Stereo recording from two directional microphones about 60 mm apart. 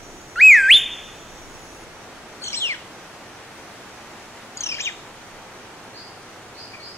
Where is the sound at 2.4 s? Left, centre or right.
Left.